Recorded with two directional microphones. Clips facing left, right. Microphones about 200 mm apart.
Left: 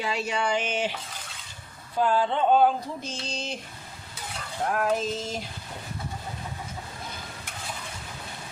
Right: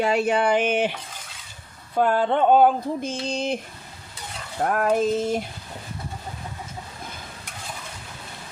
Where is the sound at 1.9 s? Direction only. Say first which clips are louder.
Right 4 dB; 55° right (ahead or behind).